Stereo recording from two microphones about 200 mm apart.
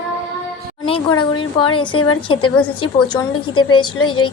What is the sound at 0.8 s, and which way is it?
A woman's voice, 25° left (ahead or behind).